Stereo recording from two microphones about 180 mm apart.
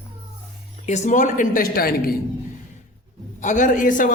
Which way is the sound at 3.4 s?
45° left (ahead or behind).